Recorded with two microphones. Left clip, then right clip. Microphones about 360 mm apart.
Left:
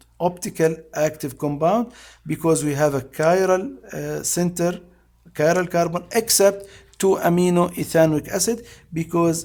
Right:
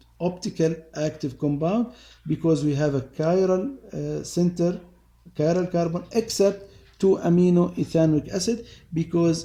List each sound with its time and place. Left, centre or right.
0.2 s speech: left